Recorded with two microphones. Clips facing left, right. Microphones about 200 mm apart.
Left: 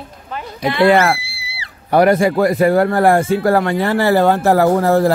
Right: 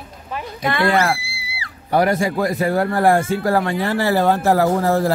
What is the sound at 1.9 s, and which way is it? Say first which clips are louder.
Speech: left 5 dB; 65° left (ahead or behind).